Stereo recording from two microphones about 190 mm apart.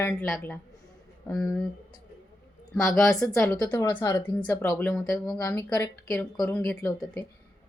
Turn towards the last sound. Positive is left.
turn(degrees=10)  # may be behind; listen again after turning